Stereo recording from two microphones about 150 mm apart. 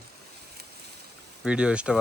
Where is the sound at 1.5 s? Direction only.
5° right (ahead or behind).